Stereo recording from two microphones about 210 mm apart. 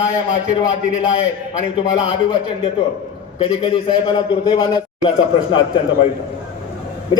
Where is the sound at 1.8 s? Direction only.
20° left (ahead or behind).